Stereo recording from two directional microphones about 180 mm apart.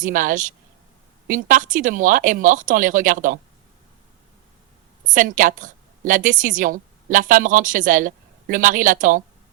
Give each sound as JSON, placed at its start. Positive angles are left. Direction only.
{"t": 0.0, "sound": "a woman's voice", "side_deg": -50}
{"t": 5.0, "sound": "a woman's voice", "side_deg": -45}